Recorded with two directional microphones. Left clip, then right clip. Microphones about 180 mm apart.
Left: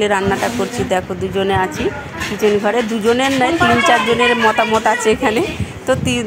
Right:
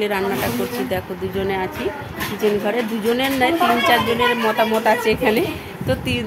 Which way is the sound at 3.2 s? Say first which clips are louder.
Even; 20° left (ahead or behind).